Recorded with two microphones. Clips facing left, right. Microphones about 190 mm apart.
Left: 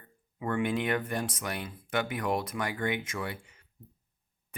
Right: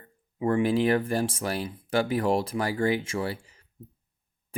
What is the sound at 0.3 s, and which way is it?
Speech, 30° right (ahead or behind).